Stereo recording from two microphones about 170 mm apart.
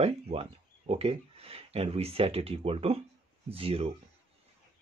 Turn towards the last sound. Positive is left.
turn(degrees=-35)  # may be behind; listen again after turning